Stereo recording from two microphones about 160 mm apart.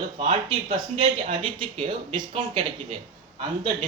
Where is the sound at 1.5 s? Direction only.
30° right (ahead or behind).